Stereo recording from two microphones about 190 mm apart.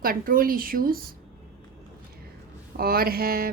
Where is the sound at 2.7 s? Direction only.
55° right (ahead or behind).